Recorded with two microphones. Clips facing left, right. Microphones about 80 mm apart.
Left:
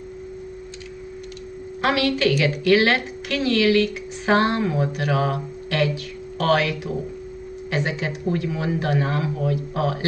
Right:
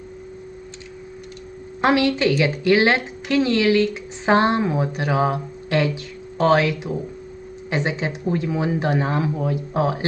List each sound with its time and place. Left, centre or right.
1.8 s a woman's voice: right